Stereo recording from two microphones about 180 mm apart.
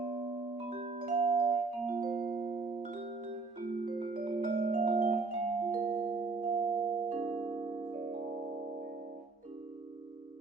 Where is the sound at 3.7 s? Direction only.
50° right (ahead or behind).